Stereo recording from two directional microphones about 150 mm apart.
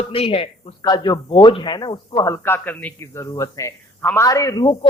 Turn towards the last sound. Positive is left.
turn(degrees=25)  # may be behind; listen again after turning